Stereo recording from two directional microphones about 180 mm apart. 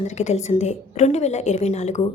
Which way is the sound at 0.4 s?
40° left (ahead or behind).